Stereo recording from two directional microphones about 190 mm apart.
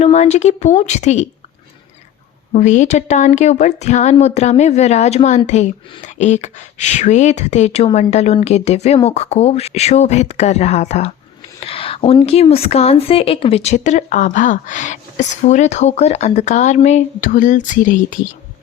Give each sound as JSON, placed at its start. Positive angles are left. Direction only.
{"t": 0.0, "sound": "speech", "side_deg": 35}
{"t": 2.5, "sound": "speech", "side_deg": 40}